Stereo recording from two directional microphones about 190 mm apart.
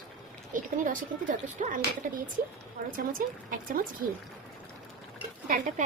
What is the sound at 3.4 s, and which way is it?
Speech, 45° right (ahead or behind).